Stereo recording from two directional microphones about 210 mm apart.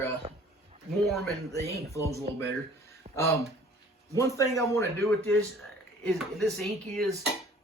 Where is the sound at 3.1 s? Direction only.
30° right (ahead or behind).